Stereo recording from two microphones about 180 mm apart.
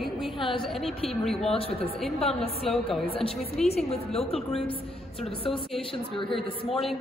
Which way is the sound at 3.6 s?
35° left (ahead or behind).